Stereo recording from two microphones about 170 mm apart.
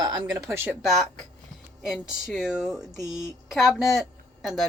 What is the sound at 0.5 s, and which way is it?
Speech, 5° right (ahead or behind).